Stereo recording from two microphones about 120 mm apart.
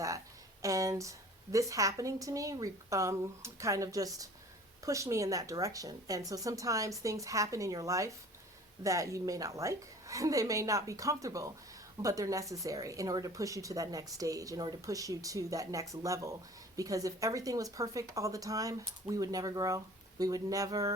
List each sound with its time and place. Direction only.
0.6 s speech: 25° right (ahead or behind)